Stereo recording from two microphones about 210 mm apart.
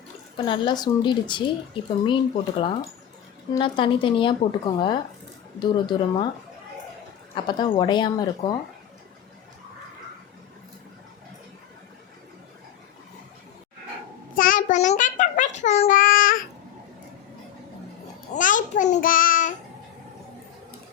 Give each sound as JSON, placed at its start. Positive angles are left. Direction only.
{"t": 0.3, "sound": "speech", "side_deg": 25}
{"t": 3.5, "sound": "speech", "side_deg": 25}
{"t": 7.3, "sound": "speech", "side_deg": 25}
{"t": 14.3, "sound": "child singing", "side_deg": 40}
{"t": 18.3, "sound": "child singing", "side_deg": 40}